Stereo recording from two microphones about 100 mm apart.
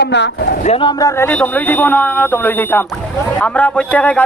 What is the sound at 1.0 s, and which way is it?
A man's voice, 25° left (ahead or behind).